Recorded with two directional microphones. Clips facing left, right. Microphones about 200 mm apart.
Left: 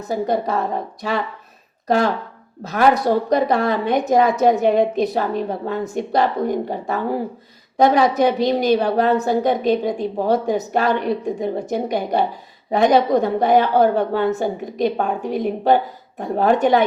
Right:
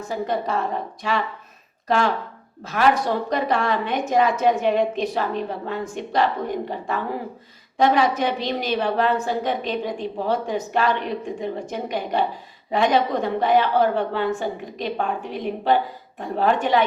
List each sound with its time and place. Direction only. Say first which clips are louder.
0.1 s a woman's voice: left 4 dB; 40° left (ahead or behind)
1.9 s a woman's voice: left 3 dB; 40° left (ahead or behind)